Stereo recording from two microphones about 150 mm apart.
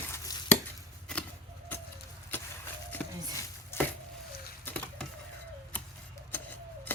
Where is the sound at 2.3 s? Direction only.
15° left (ahead or behind).